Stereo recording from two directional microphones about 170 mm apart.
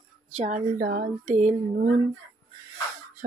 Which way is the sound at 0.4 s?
45° right (ahead or behind).